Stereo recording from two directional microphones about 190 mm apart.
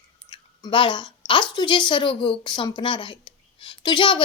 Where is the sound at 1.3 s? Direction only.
25° left (ahead or behind).